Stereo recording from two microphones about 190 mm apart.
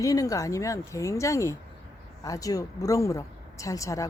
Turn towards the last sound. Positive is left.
turn(degrees=15)  # may be behind; listen again after turning